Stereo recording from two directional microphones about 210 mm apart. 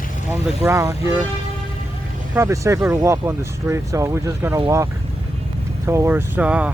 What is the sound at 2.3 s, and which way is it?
Speech, 10° right (ahead or behind).